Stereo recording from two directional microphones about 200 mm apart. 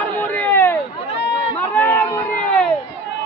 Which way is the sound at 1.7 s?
10° left (ahead or behind).